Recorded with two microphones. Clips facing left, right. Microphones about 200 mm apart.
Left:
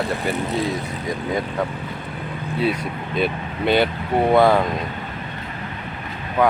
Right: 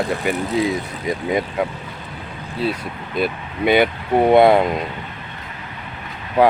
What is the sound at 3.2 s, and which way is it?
Speech, 10° right (ahead or behind).